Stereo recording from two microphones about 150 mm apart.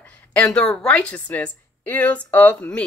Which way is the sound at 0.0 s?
10° left (ahead or behind).